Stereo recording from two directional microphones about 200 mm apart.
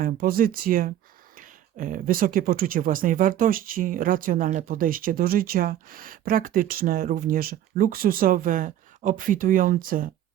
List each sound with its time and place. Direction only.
0.0 s speech: 45° right (ahead or behind)